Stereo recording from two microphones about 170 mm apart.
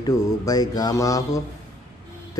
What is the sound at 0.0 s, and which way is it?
Speech, 20° left (ahead or behind).